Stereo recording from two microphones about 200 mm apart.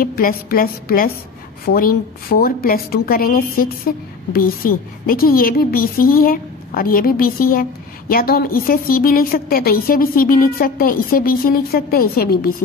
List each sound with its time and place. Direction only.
0.0 s a woman's voice: 45° left (ahead or behind)